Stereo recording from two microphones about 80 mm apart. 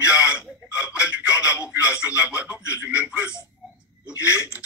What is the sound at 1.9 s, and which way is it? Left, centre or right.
Speech, centre.